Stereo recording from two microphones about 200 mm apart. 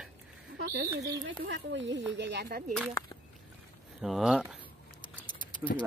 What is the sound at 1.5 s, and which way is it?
Speech, 65° right (ahead or behind).